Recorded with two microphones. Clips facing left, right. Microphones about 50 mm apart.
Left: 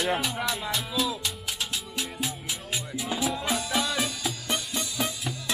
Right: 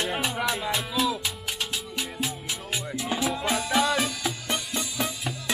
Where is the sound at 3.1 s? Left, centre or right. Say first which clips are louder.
Right 2 dB; centre.